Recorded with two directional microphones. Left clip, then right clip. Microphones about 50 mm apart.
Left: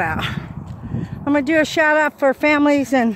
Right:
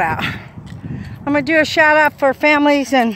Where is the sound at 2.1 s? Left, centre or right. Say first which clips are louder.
Right 2 dB; centre.